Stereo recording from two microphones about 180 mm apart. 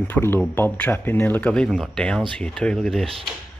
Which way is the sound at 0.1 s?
10° left (ahead or behind).